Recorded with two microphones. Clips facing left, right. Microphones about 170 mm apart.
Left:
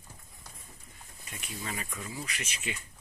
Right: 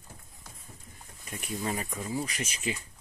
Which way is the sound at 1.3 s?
45° right (ahead or behind).